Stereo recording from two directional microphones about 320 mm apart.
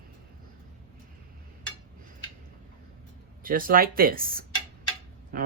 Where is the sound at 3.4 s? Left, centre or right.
Right.